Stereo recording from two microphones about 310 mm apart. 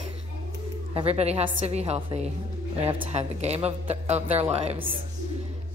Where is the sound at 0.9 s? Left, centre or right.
Centre.